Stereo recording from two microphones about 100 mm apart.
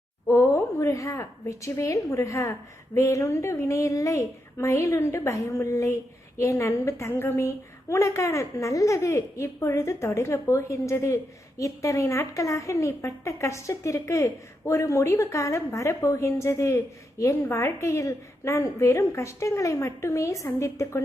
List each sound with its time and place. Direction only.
0.3 s a woman's voice: 30° left (ahead or behind)